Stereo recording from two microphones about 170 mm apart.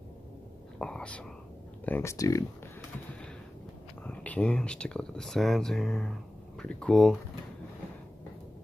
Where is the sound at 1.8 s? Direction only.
15° left (ahead or behind).